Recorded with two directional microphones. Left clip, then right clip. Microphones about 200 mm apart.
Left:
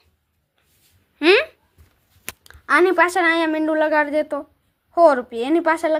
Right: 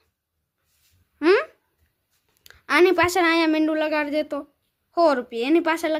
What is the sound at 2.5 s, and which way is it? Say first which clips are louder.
A woman's voice: left 2 dB; 10° right (ahead or behind).